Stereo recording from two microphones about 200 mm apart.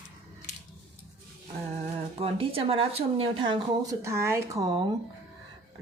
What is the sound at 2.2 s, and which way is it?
Speech, 30° right (ahead or behind).